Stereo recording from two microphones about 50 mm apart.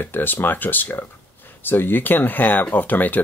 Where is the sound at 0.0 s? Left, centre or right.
Left.